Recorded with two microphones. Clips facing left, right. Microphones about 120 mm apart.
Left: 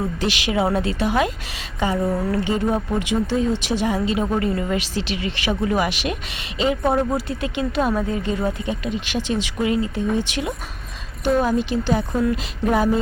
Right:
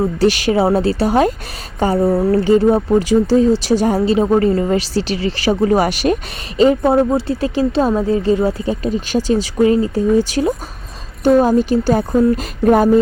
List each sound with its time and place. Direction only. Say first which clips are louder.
0.0 s speech: right 9 dB; 40° right (ahead or behind)
6.8 s speech: right 6 dB; 25° right (ahead or behind); by 12.9 s 45° right (ahead or behind)